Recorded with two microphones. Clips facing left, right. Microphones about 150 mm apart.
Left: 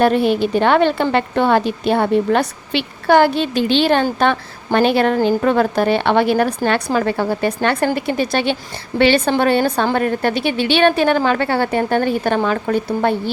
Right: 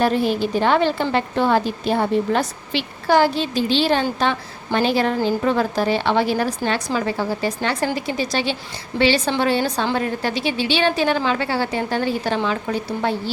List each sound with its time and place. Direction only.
0.0 s a woman's voice: 60° left (ahead or behind)